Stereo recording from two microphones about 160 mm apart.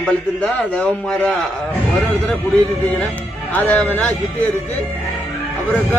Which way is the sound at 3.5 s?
10° left (ahead or behind).